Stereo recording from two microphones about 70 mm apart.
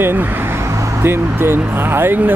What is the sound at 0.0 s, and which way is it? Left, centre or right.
Speech, right.